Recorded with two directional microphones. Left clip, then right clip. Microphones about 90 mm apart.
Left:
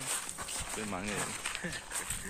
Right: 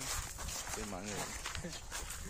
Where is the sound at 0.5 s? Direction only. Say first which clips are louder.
Left 4 dB; centre (ahead or behind).